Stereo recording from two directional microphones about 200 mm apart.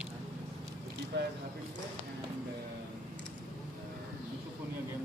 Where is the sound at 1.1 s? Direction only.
60° right (ahead or behind).